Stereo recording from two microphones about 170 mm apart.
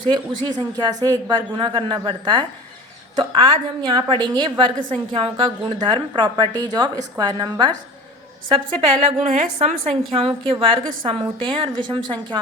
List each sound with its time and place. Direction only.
0.1 s a woman's voice: 25° right (ahead or behind)
9.2 s a woman's voice: 45° right (ahead or behind)
10.2 s a woman's voice: 35° right (ahead or behind)